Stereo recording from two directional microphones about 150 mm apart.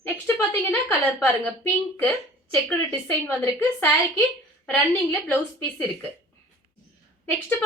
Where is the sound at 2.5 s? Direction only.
10° left (ahead or behind).